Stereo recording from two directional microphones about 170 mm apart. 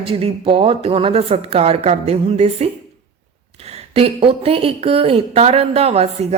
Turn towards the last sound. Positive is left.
turn(degrees=-40)  # may be behind; listen again after turning